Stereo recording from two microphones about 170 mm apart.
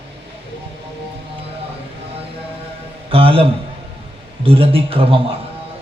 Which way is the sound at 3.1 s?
35° right (ahead or behind).